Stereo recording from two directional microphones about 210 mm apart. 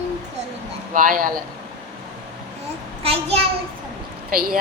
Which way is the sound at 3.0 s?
30° right (ahead or behind).